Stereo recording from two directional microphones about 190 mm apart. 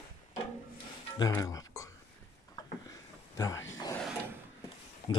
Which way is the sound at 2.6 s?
20° left (ahead or behind).